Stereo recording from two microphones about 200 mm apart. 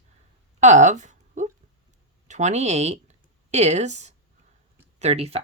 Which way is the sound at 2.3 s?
35° right (ahead or behind).